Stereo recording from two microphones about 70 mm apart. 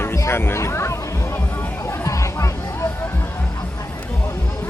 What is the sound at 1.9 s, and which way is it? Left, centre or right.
Chatter, left.